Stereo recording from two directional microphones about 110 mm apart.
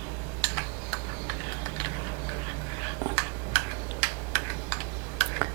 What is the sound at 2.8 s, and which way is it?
Typing, 25° right (ahead or behind).